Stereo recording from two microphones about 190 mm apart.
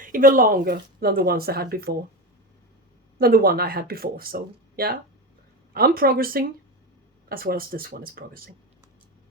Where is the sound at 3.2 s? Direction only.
55° right (ahead or behind).